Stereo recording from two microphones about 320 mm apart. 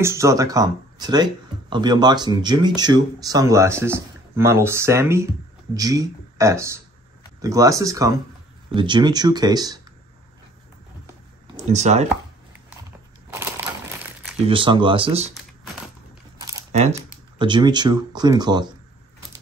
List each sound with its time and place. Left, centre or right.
0.0 s speech: centre
11.5 s speech: right
13.3 s crushing: centre
14.5 s speech: centre
16.3 s a sound: centre
17.4 s speech: centre